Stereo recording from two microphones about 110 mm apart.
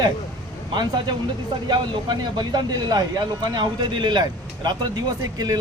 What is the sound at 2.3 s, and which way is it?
Speech, 40° right (ahead or behind).